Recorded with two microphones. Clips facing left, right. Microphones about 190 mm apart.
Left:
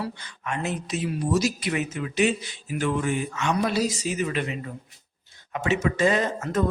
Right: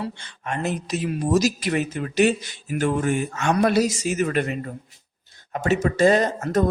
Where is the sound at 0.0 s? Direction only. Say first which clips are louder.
Right 1 dB; 25° right (ahead or behind).